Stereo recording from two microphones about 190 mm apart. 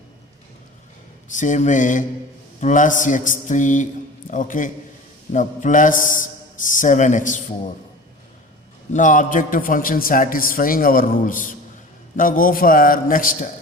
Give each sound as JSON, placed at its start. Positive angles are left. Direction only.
{"t": 1.3, "sound": "a man's voice", "side_deg": 40}
{"t": 8.9, "sound": "a man's voice", "side_deg": 40}